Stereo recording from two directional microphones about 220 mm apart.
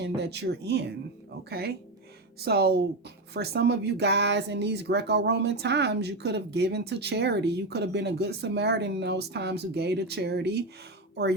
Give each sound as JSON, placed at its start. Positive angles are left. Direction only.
{"t": 0.0, "sound": "speech", "side_deg": -50}